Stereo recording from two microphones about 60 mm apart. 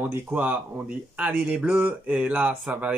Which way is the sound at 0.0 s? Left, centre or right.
Right.